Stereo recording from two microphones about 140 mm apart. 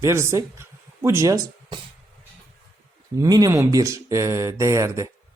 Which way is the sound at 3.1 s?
25° right (ahead or behind).